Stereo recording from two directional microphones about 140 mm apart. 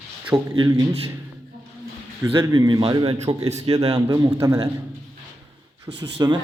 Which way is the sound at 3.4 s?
50° right (ahead or behind).